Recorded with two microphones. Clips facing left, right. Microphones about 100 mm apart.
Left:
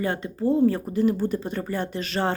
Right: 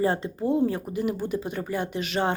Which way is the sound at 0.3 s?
15° right (ahead or behind).